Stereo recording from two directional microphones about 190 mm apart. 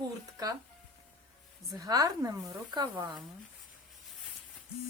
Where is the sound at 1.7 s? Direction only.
20° right (ahead or behind).